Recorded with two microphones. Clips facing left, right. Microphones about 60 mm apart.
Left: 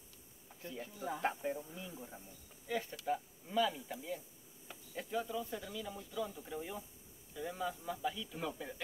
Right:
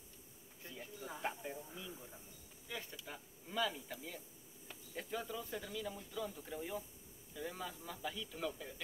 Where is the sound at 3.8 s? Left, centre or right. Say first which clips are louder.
Left 5 dB; centre.